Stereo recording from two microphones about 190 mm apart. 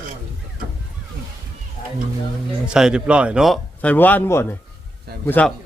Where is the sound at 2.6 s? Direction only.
5° right (ahead or behind).